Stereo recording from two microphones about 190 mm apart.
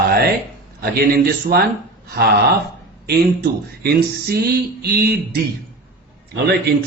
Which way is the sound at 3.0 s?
55° right (ahead or behind).